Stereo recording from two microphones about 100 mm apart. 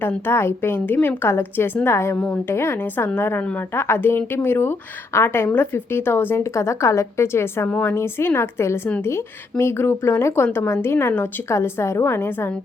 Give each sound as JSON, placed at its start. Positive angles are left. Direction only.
{"t": 0.3, "sound": "speech", "side_deg": 25}